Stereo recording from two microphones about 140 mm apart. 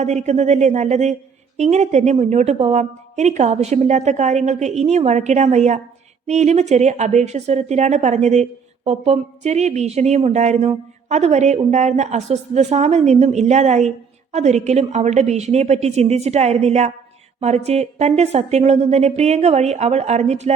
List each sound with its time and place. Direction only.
0.0 s a woman's voice: 55° right (ahead or behind)